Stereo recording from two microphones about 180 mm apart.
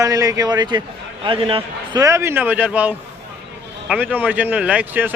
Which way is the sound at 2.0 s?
15° right (ahead or behind).